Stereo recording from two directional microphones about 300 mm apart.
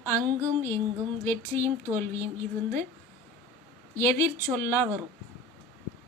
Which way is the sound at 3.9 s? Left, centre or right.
Centre.